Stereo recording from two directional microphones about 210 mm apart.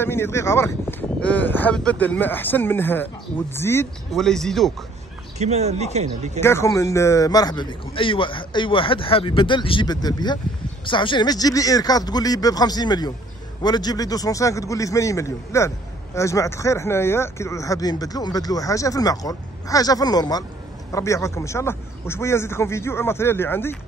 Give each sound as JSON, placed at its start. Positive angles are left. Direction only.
{"t": 0.0, "sound": "speech", "side_deg": 10}
{"t": 5.4, "sound": "speech", "side_deg": -30}
{"t": 6.4, "sound": "a man's voice", "side_deg": 15}